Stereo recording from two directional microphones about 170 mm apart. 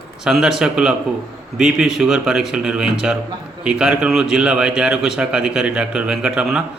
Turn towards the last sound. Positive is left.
turn(degrees=-5)  # may be behind; listen again after turning